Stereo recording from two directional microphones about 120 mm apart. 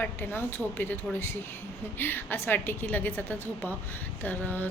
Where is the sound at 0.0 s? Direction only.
15° left (ahead or behind).